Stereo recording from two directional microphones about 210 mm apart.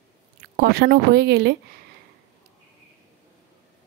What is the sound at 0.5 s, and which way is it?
Speech, 50° right (ahead or behind).